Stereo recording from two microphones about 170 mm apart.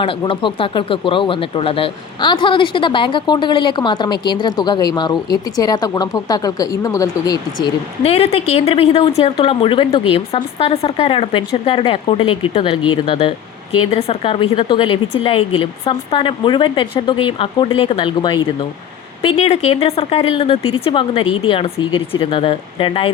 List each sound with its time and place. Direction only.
0.0 s speech: 30° left (ahead or behind)
8.0 s a woman's voice: 35° left (ahead or behind)